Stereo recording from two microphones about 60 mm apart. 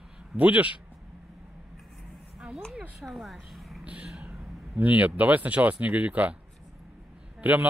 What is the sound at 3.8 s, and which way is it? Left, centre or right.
Vehicle, right.